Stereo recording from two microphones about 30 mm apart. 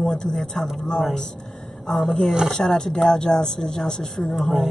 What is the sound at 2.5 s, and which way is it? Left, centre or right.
A woman's voice, centre.